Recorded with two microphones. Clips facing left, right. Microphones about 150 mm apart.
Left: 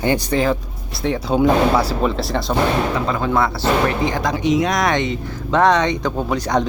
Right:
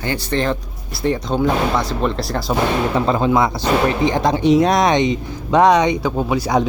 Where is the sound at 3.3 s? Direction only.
15° right (ahead or behind).